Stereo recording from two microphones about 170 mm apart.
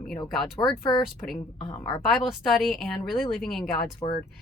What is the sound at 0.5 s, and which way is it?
Speech, 30° left (ahead or behind).